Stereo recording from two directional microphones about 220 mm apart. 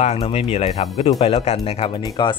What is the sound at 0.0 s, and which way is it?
Speech, 30° left (ahead or behind).